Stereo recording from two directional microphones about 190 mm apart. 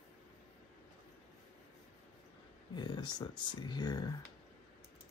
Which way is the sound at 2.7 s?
20° left (ahead or behind).